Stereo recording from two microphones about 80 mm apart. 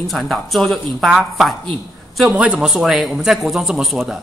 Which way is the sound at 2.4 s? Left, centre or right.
Centre.